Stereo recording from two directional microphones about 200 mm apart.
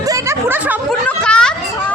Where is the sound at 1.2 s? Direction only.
5° left (ahead or behind).